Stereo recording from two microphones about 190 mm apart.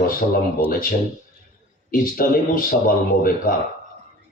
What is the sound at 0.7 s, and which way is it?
Speech, 50° left (ahead or behind).